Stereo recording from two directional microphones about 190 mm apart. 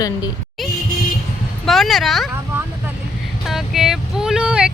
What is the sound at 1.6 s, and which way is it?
Speech, centre (ahead or behind).